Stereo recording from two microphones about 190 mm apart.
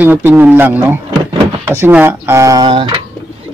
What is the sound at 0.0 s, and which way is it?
Speech, 10° right (ahead or behind).